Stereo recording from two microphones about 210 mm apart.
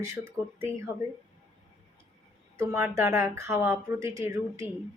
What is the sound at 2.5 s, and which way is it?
Speech, 10° right (ahead or behind).